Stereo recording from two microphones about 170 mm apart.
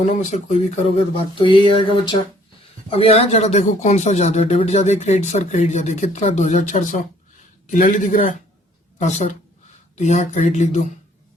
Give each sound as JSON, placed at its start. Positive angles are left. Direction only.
{"t": 0.0, "sound": "speech", "side_deg": 45}
{"t": 1.4, "sound": "speech", "side_deg": 30}